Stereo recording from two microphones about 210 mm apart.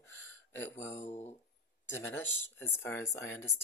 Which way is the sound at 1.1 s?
30° left (ahead or behind).